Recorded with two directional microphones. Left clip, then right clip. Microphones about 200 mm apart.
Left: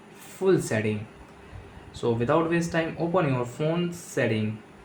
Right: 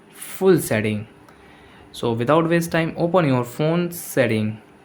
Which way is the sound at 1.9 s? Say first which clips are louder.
Right 5 dB; 45° right (ahead or behind).